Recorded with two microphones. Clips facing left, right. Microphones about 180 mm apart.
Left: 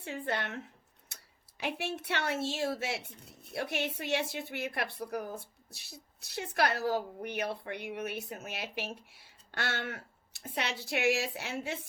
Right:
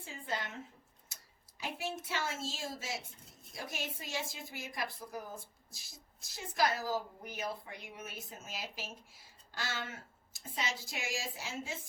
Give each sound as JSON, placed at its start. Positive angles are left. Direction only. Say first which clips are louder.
{"t": 0.0, "sound": "speech", "louder": "left 5 dB", "side_deg": 70}